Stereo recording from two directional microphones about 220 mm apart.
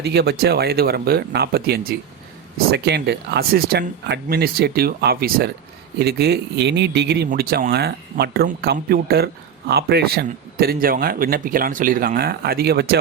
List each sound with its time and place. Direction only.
0.0 s speech: 50° right (ahead or behind)